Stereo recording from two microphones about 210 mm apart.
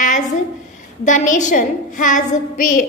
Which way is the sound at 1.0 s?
35° left (ahead or behind).